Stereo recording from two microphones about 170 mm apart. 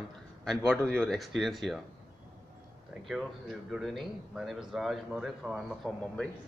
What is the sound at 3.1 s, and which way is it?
Speech, centre (ahead or behind).